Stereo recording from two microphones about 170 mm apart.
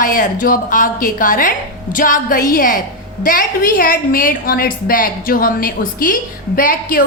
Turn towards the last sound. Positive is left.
turn(degrees=55)  # may be behind; listen again after turning